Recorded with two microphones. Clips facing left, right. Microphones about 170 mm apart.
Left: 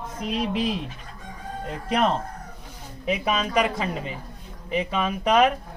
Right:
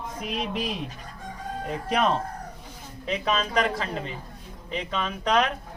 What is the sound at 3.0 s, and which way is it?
Speech, 10° left (ahead or behind).